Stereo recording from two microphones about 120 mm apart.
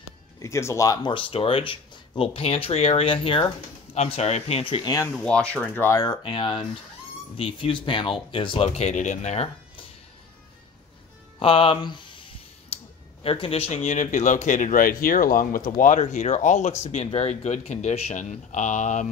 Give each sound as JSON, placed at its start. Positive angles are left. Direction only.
{"t": 0.4, "sound": "speech", "side_deg": 25}
{"t": 1.0, "sound": "speech", "side_deg": 50}
{"t": 3.9, "sound": "speech", "side_deg": 65}
{"t": 5.1, "sound": "speech", "side_deg": 5}
{"t": 5.9, "sound": "speech", "side_deg": 35}
{"t": 11.3, "sound": "speech", "side_deg": 45}
{"t": 12.6, "sound": "speech", "side_deg": 55}
{"t": 15.8, "sound": "speech", "side_deg": 90}